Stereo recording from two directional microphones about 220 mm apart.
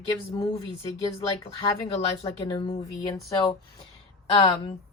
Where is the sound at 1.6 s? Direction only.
25° left (ahead or behind).